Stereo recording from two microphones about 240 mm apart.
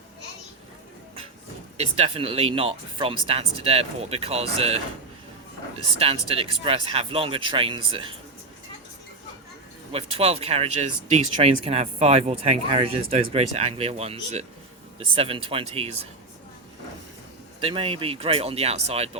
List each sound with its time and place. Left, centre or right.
1.8 s speech: right
6.0 s speech: right
9.9 s speech: right
17.6 s speech: right